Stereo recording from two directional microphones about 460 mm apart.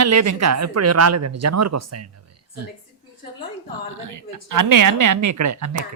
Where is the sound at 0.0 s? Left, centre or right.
Right.